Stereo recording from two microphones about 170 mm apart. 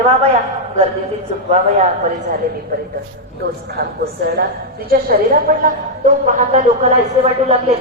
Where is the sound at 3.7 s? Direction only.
65° right (ahead or behind).